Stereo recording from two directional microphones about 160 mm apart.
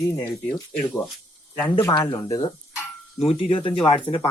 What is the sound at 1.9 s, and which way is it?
Speech, 30° left (ahead or behind).